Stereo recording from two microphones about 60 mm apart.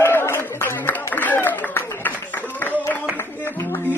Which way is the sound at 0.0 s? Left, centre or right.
Left.